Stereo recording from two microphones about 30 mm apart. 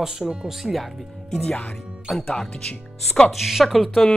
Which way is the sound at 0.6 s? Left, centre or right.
Centre.